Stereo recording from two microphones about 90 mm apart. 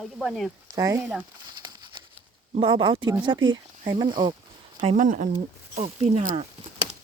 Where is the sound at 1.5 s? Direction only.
55° right (ahead or behind).